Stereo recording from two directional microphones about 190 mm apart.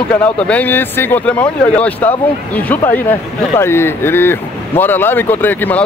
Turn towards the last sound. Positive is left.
turn(degrees=10)  # may be behind; listen again after turning